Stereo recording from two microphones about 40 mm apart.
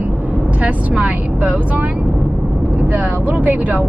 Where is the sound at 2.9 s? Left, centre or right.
Right.